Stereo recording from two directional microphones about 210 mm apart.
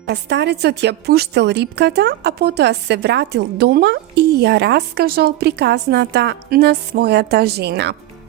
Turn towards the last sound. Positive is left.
turn(degrees=-50)  # may be behind; listen again after turning